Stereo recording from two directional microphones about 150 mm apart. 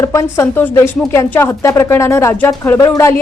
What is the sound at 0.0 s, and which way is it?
A woman's voice, 20° left (ahead or behind).